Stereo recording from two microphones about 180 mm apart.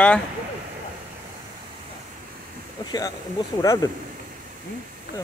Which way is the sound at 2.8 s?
20° left (ahead or behind).